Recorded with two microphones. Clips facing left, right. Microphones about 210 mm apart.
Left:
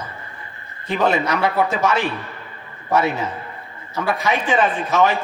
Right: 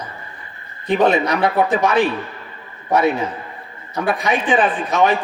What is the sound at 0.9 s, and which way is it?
A man's voice, 15° right (ahead or behind).